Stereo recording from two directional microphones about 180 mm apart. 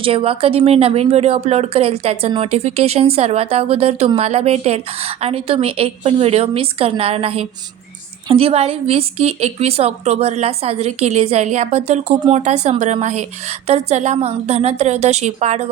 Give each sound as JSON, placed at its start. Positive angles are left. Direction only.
{"t": 0.0, "sound": "speech", "side_deg": -30}